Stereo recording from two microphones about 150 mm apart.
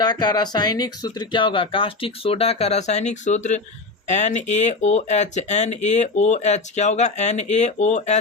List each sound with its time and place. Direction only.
0.0 s speech: 30° left (ahead or behind); by 8.2 s 50° left (ahead or behind)